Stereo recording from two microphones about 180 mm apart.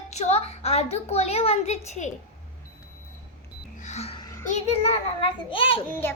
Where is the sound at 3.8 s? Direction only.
40° left (ahead or behind).